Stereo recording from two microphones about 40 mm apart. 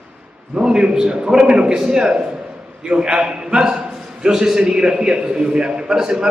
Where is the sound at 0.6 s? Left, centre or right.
Right.